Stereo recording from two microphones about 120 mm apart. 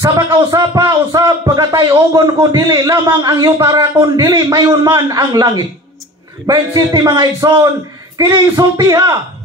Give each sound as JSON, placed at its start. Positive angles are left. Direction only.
{"t": 0.0, "sound": "a man's voice", "side_deg": -30}
{"t": 8.3, "sound": "speech", "side_deg": -35}